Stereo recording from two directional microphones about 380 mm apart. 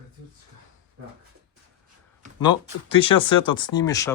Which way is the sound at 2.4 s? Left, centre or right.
Centre.